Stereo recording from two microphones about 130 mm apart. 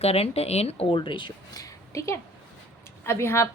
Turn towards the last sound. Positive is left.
turn(degrees=20)  # may be behind; listen again after turning